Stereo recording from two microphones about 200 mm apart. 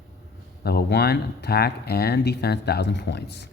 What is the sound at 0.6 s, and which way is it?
Speech, 50° left (ahead or behind).